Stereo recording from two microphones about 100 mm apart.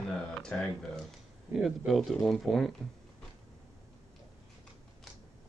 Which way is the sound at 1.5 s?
20° right (ahead or behind).